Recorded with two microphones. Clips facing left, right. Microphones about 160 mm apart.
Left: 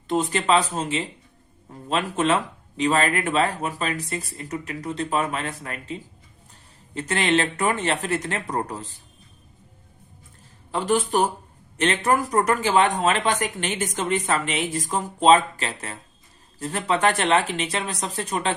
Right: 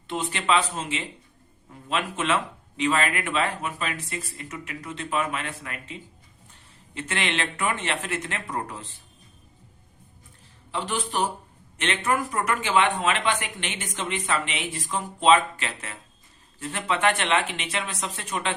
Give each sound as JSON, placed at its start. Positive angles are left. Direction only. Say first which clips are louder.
{"t": 0.1, "sound": "speech", "louder": "left 4 dB", "side_deg": 40}
{"t": 10.7, "sound": "a man's voice", "louder": "left 7 dB", "side_deg": 45}